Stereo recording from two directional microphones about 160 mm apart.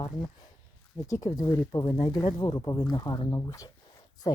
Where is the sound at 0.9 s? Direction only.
20° left (ahead or behind).